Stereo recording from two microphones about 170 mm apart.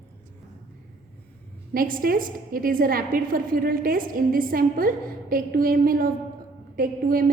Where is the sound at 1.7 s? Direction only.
55° right (ahead or behind).